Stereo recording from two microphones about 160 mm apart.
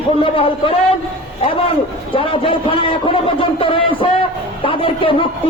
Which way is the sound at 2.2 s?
35° left (ahead or behind).